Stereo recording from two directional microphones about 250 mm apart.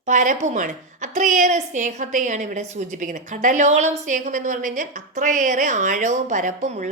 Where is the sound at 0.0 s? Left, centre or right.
Right.